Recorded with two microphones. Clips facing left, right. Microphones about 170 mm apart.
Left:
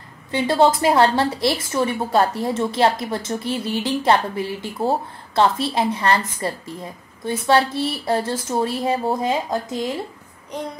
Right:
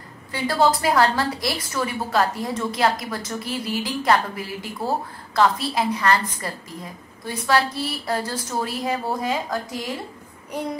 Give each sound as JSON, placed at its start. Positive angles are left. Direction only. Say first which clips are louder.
{"t": 0.3, "sound": "a woman's voice", "louder": "left 3 dB", "side_deg": 25}